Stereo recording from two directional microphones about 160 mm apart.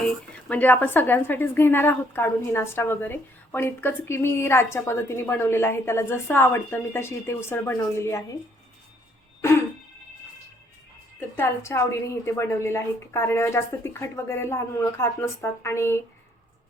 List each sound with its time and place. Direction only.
0.0 s speech: 10° left (ahead or behind)
11.3 s speech: 15° left (ahead or behind)